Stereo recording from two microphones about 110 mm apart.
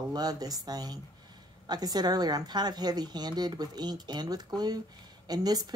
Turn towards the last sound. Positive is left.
turn(degrees=-35)  # may be behind; listen again after turning